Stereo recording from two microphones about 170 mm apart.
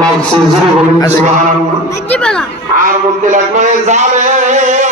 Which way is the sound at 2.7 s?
50° right (ahead or behind).